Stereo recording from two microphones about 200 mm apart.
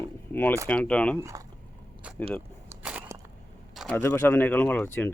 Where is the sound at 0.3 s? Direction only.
10° left (ahead or behind).